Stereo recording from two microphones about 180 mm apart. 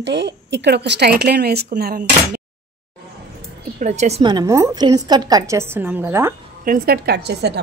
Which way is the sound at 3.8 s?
40° right (ahead or behind).